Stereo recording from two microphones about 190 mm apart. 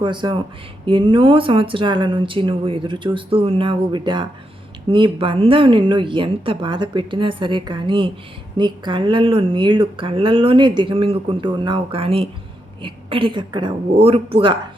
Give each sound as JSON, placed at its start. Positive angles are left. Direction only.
{"t": 0.0, "sound": "speech", "side_deg": -25}